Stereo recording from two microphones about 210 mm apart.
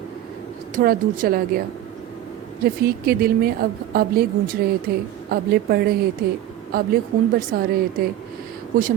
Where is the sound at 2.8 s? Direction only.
45° right (ahead or behind).